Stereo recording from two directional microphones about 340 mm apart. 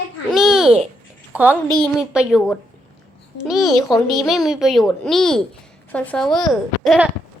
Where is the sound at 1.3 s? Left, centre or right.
Centre.